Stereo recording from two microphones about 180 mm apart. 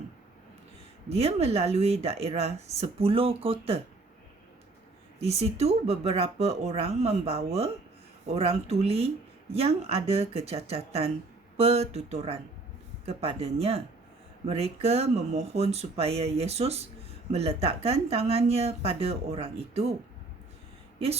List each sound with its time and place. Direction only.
1.1 s speech: 35° right (ahead or behind)
5.2 s speech: 35° right (ahead or behind)